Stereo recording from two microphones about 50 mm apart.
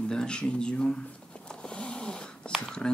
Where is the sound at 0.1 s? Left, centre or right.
Centre.